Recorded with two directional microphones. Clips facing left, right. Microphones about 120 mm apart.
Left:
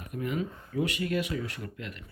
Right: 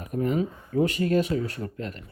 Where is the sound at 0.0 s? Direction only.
40° right (ahead or behind).